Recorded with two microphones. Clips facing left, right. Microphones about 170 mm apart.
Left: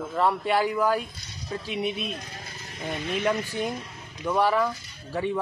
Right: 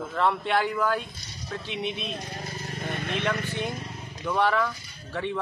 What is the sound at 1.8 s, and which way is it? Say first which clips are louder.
Speech: left 2 dB; 40° left (ahead or behind).